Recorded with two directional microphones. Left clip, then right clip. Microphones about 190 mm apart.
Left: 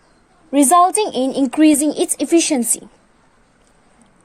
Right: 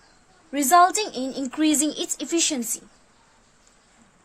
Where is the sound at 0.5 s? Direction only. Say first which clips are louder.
Left 5 dB; 30° left (ahead or behind).